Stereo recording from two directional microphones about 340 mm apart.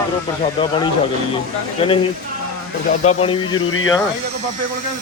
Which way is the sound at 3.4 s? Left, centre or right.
Left.